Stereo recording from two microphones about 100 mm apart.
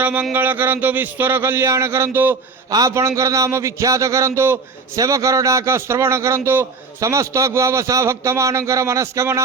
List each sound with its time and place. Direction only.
0.0 s a sound: 15° right (ahead or behind)
0.3 s a man's voice: 20° right (ahead or behind)
2.6 s a man's voice: 35° right (ahead or behind)